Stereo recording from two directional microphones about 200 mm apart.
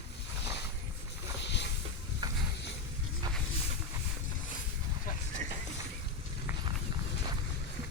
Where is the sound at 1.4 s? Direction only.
60° left (ahead or behind).